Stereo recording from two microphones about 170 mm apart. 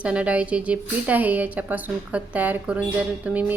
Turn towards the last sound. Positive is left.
turn(degrees=-10)  # may be behind; listen again after turning